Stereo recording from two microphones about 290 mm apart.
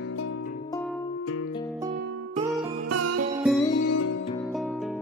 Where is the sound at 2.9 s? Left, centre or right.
Right.